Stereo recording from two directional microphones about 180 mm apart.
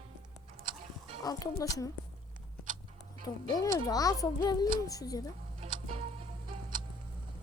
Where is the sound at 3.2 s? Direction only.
20° left (ahead or behind).